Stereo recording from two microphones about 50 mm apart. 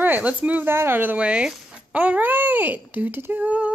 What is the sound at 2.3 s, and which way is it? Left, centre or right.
Speech, right.